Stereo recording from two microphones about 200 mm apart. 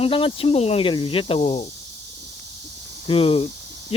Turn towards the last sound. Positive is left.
turn(degrees=30)  # may be behind; listen again after turning